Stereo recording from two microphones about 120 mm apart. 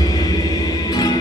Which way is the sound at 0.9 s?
35° left (ahead or behind).